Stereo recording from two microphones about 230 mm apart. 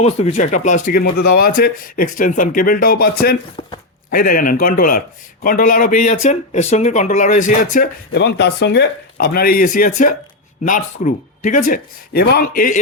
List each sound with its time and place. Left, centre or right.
0.0 s a man's voice: left